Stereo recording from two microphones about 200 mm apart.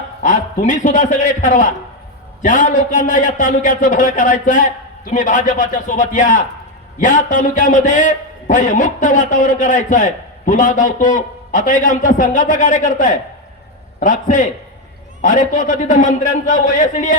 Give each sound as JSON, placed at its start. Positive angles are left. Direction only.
{"t": 0.2, "sound": "a man's voice", "side_deg": 40}